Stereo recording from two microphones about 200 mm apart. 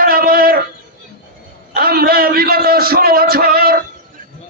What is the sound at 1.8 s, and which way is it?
A man's voice, 50° right (ahead or behind).